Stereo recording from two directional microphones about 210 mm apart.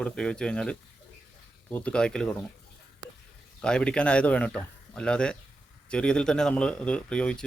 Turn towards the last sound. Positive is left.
turn(degrees=5)  # may be behind; listen again after turning